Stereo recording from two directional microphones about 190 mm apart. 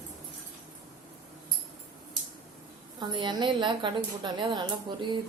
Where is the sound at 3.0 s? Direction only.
25° right (ahead or behind).